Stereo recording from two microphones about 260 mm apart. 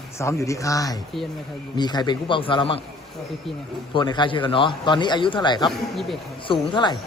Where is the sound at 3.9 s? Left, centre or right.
Centre.